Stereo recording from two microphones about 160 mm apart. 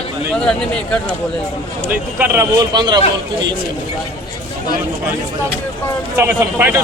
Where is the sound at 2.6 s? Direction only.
25° right (ahead or behind).